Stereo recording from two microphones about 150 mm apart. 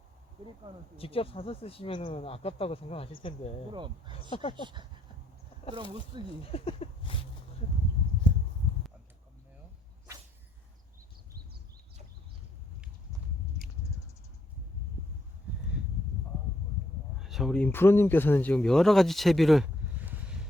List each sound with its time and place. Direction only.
0.9 s speech: 40° left (ahead or behind)
3.7 s speech: 30° right (ahead or behind)
4.1 s speech: 35° left (ahead or behind)
4.5 s speech: 30° right (ahead or behind)
6.4 s speech: 40° left (ahead or behind)
17.2 s speech: centre (ahead or behind)
20.0 s boat: 10° right (ahead or behind)